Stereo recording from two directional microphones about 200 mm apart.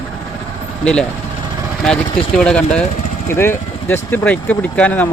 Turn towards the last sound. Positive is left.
turn(degrees=5)  # may be behind; listen again after turning